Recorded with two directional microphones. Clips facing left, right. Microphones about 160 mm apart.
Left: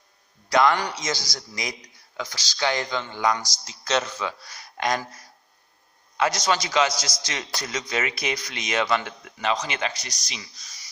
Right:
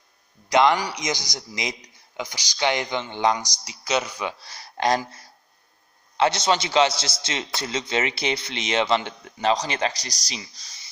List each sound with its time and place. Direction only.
0.5 s a man's voice: 20° right (ahead or behind)
3.3 s speech: 15° right (ahead or behind)
4.4 s a man's voice: 30° right (ahead or behind)